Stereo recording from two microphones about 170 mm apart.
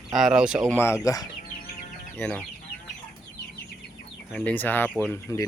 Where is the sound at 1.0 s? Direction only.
20° left (ahead or behind).